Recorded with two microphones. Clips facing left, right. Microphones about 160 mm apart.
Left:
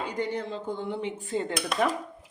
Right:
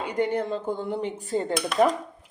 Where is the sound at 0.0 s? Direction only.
55° right (ahead or behind); by 1.5 s 40° right (ahead or behind).